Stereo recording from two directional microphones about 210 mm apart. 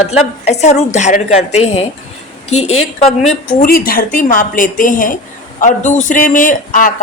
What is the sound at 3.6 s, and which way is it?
Speech, 45° left (ahead or behind).